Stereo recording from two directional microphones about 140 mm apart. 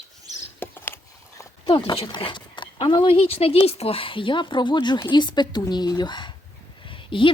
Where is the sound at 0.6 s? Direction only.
15° left (ahead or behind).